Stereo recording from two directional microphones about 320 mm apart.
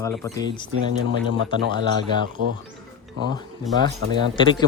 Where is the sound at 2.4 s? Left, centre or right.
Right.